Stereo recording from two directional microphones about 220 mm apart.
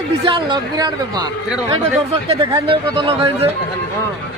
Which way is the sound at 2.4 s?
20° right (ahead or behind).